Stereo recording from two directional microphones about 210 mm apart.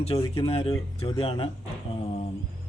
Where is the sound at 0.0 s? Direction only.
30° left (ahead or behind).